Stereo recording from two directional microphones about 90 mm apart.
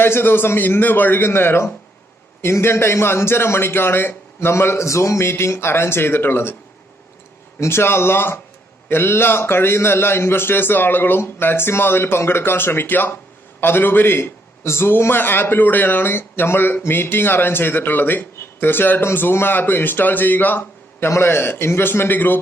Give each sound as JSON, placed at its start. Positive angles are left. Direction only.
{"t": 0.0, "sound": "a man's voice", "side_deg": 25}
{"t": 7.6, "sound": "a man's voice", "side_deg": 25}